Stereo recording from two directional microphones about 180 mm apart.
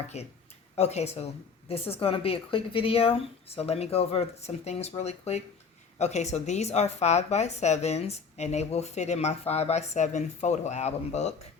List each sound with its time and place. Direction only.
0.1 s a woman's voice: 35° left (ahead or behind)